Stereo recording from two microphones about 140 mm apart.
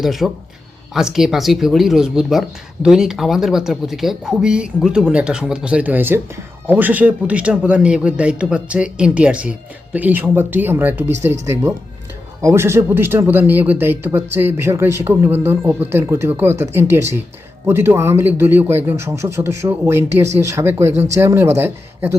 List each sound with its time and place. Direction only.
0.0 s speech: centre (ahead or behind)